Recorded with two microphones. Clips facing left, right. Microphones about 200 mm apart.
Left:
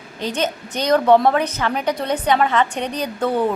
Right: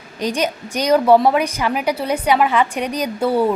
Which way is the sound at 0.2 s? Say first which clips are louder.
Right 2 dB; 10° right (ahead or behind).